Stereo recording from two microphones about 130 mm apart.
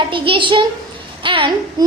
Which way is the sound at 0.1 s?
40° right (ahead or behind).